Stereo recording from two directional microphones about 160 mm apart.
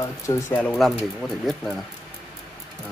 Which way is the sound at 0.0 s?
25° left (ahead or behind).